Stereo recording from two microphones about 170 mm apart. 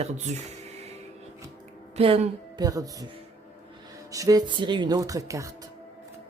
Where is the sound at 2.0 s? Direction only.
35° right (ahead or behind).